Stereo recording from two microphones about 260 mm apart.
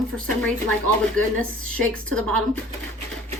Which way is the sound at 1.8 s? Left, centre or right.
Centre.